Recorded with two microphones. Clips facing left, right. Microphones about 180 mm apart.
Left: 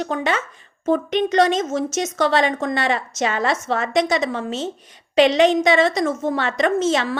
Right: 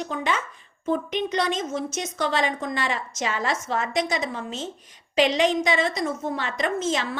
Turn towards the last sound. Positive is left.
turn(degrees=75)  # may be behind; listen again after turning